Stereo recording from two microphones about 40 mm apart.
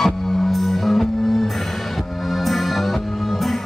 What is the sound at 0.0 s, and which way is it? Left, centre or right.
Music, centre.